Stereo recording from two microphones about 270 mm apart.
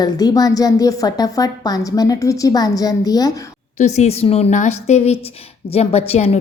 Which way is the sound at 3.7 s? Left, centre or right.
Left.